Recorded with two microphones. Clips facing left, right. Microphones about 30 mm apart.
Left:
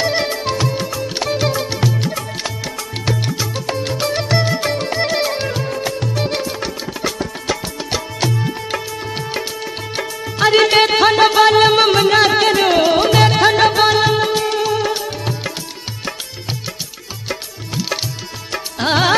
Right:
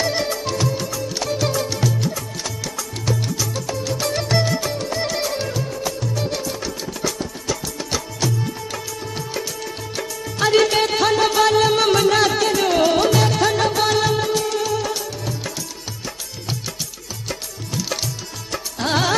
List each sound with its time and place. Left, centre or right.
0.0 s music: left
2.0 s music: left
4.6 s music: left
10.6 s music: left
12.8 s music: left
13.1 s music: left
13.8 s music: left
17.3 s music: left